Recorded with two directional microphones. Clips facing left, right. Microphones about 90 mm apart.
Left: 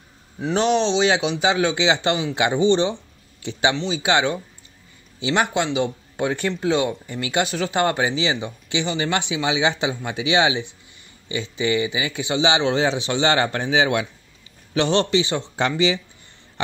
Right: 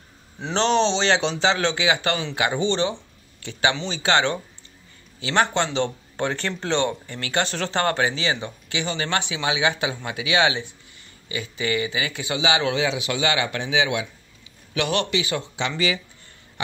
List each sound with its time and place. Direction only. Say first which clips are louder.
0.4 s a man's voice: left 1 dB; 5° left (ahead or behind)
3.7 s speech: left 5 dB; centre (ahead or behind)
4.0 s a man's voice: even; 15° left (ahead or behind); by 15.4 s 30° left (ahead or behind)